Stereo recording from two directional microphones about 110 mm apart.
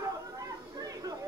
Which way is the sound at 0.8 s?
35° right (ahead or behind).